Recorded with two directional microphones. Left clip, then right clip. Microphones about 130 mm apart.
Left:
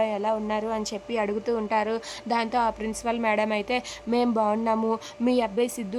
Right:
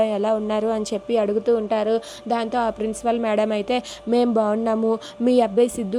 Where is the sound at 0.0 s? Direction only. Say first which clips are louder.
Right 5 dB; 35° right (ahead or behind).